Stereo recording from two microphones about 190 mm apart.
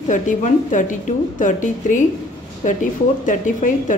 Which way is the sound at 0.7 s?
40° left (ahead or behind).